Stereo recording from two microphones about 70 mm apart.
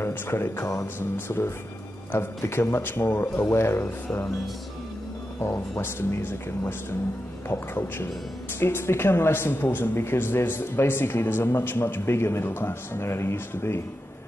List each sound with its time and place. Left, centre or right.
0.0 s speech: left
5.4 s speech: left